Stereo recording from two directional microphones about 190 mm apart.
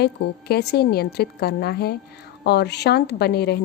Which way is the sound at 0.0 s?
60° left (ahead or behind).